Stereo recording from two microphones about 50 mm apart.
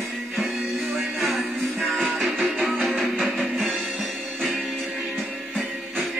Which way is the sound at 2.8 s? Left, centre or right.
Right.